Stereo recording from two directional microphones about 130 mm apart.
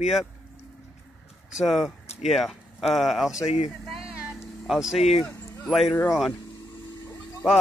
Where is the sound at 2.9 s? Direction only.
Centre (ahead or behind).